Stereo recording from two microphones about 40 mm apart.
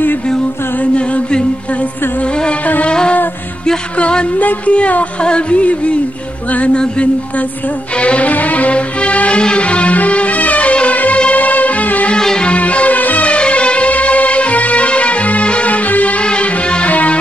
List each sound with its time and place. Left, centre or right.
0.9 s chant: left
2.6 s wind instrument: left
2.9 s music: left
4.4 s speech: left
4.7 s music: left
12.2 s music: centre
12.4 s music: left
16.3 s music: left
16.9 s music: left